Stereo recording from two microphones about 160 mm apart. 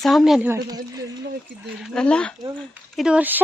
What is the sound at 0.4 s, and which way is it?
Speech, 20° right (ahead or behind).